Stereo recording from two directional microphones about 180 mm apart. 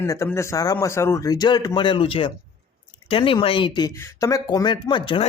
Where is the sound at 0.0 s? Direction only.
15° left (ahead or behind).